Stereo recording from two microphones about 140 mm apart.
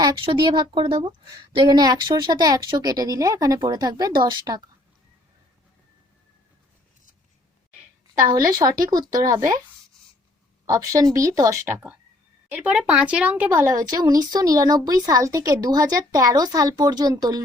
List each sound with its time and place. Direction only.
0.3 s speech: 30° right (ahead or behind)
8.3 s speech: 25° right (ahead or behind)
10.7 s speech: 25° right (ahead or behind)